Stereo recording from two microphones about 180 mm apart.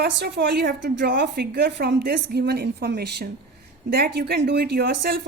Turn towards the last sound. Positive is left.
turn(degrees=-65)  # may be behind; listen again after turning